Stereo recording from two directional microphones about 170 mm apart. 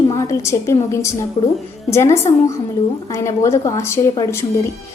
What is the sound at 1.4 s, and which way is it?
Speech, 30° left (ahead or behind).